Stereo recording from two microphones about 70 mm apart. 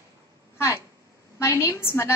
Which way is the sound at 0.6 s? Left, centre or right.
Left.